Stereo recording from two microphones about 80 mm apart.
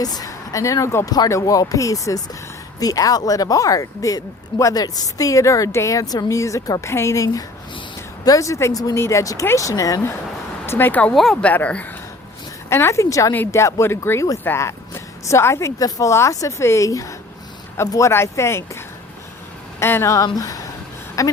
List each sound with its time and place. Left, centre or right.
0.0 s a woman's voice: left
9.0 s a woman's voice: left
10.7 s speech: left
11.1 s speech: centre
11.3 s speech: centre
12.6 s a woman's voice: left
19.8 s speech: left